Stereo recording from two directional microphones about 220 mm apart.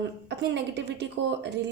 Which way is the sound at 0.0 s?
50° right (ahead or behind).